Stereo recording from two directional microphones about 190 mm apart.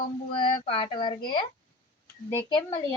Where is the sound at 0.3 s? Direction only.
25° left (ahead or behind).